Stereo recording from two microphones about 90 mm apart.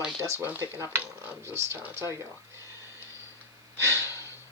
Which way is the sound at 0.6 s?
30° right (ahead or behind).